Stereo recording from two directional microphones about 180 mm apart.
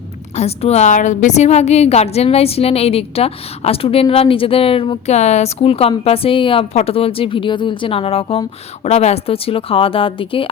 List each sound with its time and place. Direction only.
0.3 s a woman's voice: 35° left (ahead or behind)